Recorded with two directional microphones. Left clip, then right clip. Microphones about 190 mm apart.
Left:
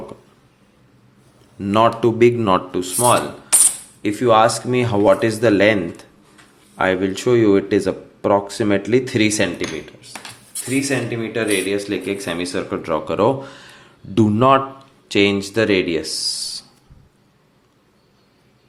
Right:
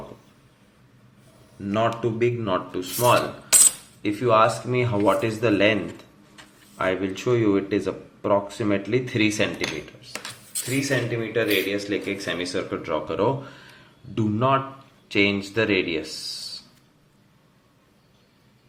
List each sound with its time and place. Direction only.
1.6 s speech: 50° left (ahead or behind)
3.0 s rub: 25° left (ahead or behind)
4.0 s speech: 35° left (ahead or behind)
10.8 s speech: 35° left (ahead or behind)